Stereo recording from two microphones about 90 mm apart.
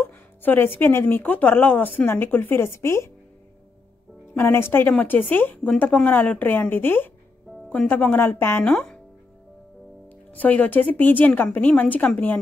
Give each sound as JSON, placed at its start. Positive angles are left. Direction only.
{"t": 0.0, "sound": "speech", "side_deg": 20}
{"t": 4.4, "sound": "speech", "side_deg": 25}
{"t": 10.0, "sound": "a woman's voice", "side_deg": 20}